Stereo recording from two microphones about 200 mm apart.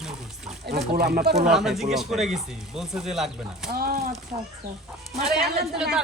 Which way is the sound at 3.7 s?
50° right (ahead or behind).